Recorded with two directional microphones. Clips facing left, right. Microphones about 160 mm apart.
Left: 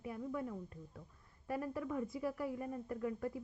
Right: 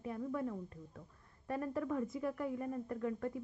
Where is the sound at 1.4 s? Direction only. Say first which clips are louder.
Right 2 dB; 15° left (ahead or behind).